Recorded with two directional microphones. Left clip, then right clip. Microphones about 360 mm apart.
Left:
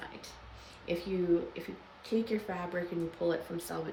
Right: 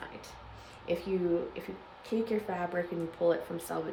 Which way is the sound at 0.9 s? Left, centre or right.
Centre.